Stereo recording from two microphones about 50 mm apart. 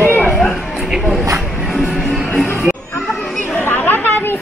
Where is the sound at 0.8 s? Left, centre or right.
Centre.